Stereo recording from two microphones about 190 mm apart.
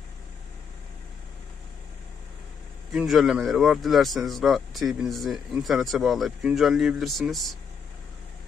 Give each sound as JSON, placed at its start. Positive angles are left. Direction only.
{"t": 2.9, "sound": "speech", "side_deg": 0}